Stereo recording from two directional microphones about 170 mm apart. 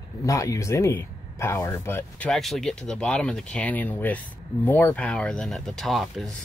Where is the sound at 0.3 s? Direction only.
20° left (ahead or behind).